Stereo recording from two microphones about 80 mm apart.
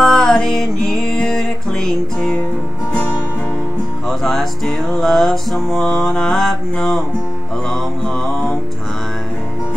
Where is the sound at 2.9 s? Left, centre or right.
Centre.